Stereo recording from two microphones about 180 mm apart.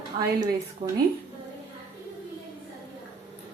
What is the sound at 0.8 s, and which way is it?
Speech, 25° right (ahead or behind).